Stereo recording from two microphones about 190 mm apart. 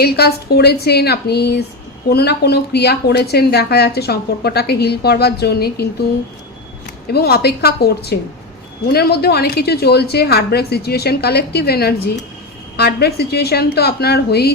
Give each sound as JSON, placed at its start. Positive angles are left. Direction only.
{"t": 0.0, "sound": "speech", "side_deg": 55}
{"t": 7.1, "sound": "speech", "side_deg": 55}